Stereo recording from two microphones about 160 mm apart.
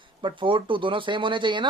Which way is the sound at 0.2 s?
30° right (ahead or behind).